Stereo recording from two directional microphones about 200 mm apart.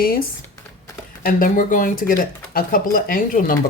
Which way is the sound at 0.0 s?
45° left (ahead or behind).